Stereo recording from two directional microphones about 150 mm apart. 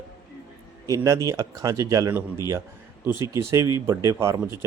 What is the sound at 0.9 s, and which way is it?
Speech, 20° right (ahead or behind).